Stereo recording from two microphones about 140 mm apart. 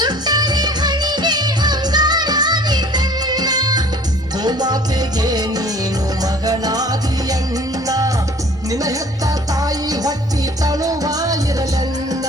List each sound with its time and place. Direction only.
0.0 s music: 30° right (ahead or behind)